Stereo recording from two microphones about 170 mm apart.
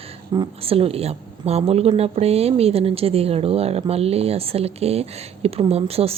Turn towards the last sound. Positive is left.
turn(degrees=-35)  # may be behind; listen again after turning